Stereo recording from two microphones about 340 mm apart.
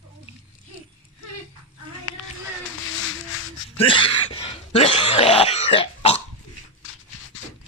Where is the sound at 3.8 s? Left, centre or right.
Centre.